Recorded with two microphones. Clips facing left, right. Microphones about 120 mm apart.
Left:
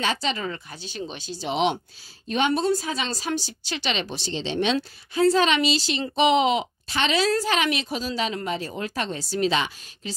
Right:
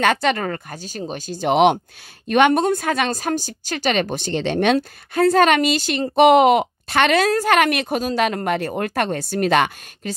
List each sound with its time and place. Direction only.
0.0 s speech: 60° right (ahead or behind)